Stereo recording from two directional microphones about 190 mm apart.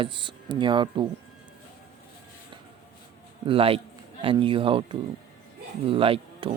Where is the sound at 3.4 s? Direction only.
30° right (ahead or behind).